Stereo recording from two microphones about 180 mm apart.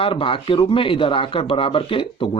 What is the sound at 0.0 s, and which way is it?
A man's voice, 30° left (ahead or behind).